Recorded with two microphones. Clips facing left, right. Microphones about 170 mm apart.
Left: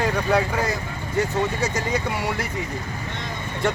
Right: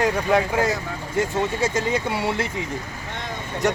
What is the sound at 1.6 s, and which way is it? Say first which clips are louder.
Speech: right 2 dB; 25° right (ahead or behind).